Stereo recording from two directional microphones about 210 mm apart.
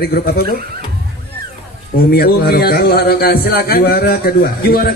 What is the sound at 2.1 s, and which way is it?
A man's voice, 45° left (ahead or behind).